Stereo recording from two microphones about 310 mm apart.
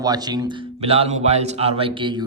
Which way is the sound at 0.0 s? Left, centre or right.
Centre.